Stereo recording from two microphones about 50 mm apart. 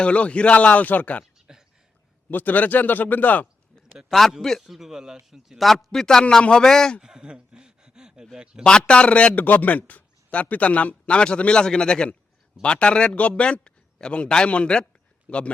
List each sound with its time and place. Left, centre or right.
0.0 s speech: left
1.5 s a sound: centre
2.3 s a man's voice: left
4.1 s a man's voice: centre
4.6 s a man's voice: centre
7.0 s speech: centre
8.9 s speech: left
9.4 s speech: left